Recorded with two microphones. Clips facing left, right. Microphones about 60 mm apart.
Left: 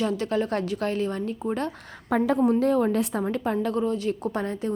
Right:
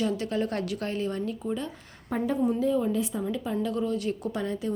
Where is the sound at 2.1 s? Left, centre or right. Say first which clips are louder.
Left 6 dB; left.